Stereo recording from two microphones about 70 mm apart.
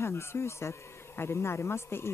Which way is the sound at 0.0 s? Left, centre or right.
Left.